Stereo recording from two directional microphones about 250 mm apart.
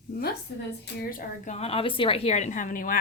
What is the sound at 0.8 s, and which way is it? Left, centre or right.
A woman's voice, left.